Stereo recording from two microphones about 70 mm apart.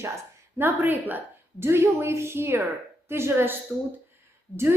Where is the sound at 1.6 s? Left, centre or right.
Right.